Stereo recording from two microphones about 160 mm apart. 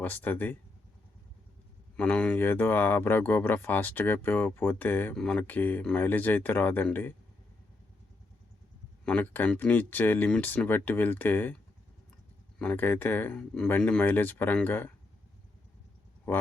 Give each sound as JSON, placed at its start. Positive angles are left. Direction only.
{"t": 0.0, "sound": "speech", "side_deg": 10}
{"t": 2.0, "sound": "speech", "side_deg": 10}
{"t": 9.0, "sound": "speech", "side_deg": 10}
{"t": 12.5, "sound": "speech", "side_deg": 10}
{"t": 16.3, "sound": "speech", "side_deg": 10}